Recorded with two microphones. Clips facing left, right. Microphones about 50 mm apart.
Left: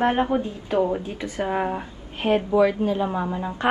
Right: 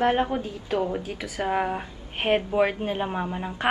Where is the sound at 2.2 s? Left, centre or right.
Right.